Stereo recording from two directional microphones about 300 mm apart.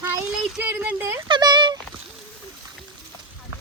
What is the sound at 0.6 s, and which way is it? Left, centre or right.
Speech, centre.